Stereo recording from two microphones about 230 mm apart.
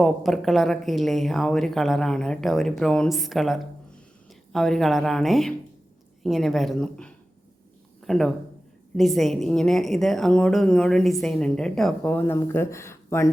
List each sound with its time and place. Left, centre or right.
0.0 s a woman's voice: centre